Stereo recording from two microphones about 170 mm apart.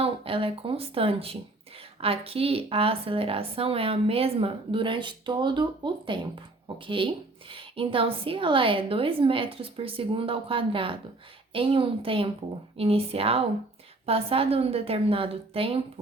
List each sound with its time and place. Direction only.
0.0 s a woman's voice: 35° right (ahead or behind)